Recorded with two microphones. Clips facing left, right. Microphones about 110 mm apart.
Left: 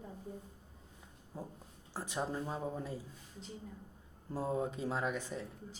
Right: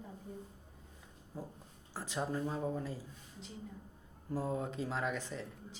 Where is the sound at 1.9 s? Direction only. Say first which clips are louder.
Even; 20° left (ahead or behind).